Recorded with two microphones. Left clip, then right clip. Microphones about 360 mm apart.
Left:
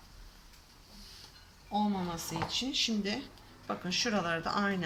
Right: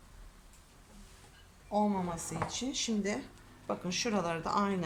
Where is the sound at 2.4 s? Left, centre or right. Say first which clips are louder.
Left 5 dB; centre.